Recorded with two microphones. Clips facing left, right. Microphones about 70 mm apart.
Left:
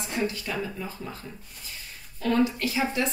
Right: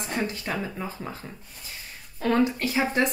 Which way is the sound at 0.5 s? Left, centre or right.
Right.